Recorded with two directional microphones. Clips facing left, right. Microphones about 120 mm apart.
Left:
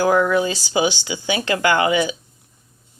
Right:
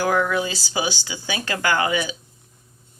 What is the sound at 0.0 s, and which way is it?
Speech, 20° left (ahead or behind).